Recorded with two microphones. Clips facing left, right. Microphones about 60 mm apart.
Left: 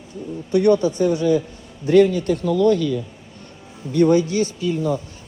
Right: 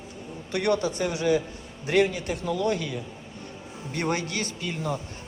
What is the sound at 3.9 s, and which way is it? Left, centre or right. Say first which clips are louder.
Speech: left 12 dB; right.